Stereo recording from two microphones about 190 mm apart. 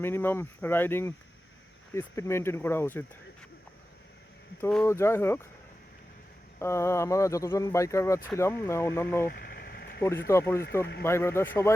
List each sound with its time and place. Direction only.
0.0 s speech: 10° left (ahead or behind)
4.7 s speech: 10° left (ahead or behind)
6.6 s speech: 15° left (ahead or behind)
9.2 s a sound: 50° left (ahead or behind)
10.0 s speech: 15° left (ahead or behind)